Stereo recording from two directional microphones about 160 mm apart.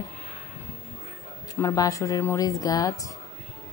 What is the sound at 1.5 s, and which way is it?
Speech, 20° left (ahead or behind).